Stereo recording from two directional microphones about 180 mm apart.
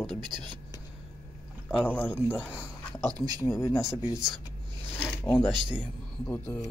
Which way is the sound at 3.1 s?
20° right (ahead or behind).